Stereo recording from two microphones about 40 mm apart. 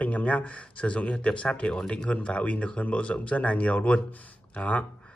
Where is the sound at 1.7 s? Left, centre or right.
Left.